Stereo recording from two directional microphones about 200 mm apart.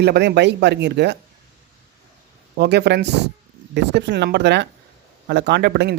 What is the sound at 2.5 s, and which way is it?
Speech, 55° right (ahead or behind).